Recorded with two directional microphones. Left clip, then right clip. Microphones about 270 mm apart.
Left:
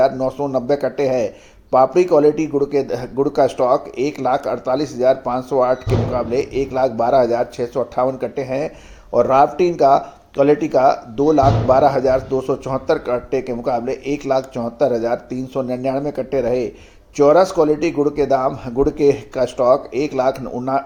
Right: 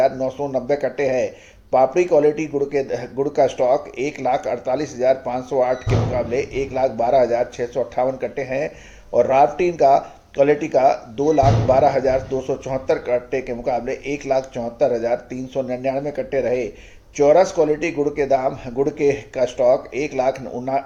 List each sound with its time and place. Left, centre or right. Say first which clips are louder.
0.0 s speech: left 2 dB; left